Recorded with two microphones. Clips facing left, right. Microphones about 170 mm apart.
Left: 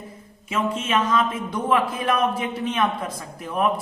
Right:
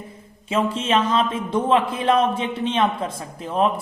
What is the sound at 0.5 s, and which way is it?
A man's voice, 30° right (ahead or behind).